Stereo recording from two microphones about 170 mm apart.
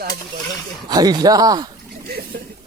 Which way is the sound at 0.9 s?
25° right (ahead or behind).